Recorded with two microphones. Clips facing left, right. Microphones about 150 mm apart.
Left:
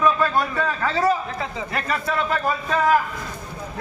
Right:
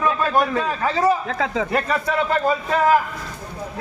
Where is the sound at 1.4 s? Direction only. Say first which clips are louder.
Right 7 dB; 90° right.